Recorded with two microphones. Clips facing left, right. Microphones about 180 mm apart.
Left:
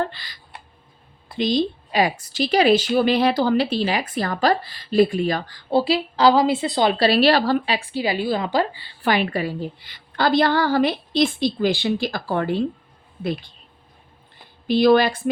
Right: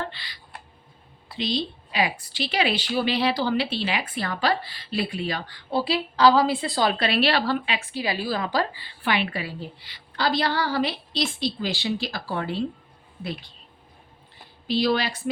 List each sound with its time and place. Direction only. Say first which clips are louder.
0.0 s a sound: left 7 dB; 45° left (ahead or behind)
1.3 s a woman's voice: left 7 dB; 45° left (ahead or behind)
5.7 s a woman's voice: left 5 dB; 25° left (ahead or behind)
6.9 s a woman's voice: left 6 dB; 35° left (ahead or behind)
9.0 s a woman's voice: left 5 dB; 45° left (ahead or behind)
14.7 s a woman's voice: left 8 dB; 50° left (ahead or behind)